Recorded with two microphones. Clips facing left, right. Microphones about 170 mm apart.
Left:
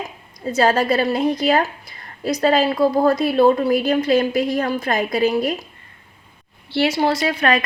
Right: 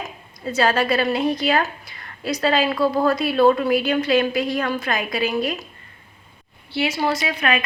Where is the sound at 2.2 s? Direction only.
40° left (ahead or behind).